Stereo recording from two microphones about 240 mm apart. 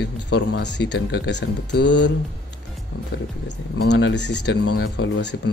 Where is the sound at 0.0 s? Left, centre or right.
Left.